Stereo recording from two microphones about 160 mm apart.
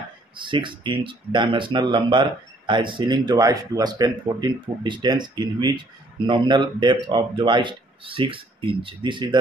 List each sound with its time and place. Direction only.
0.4 s speech: 30° right (ahead or behind)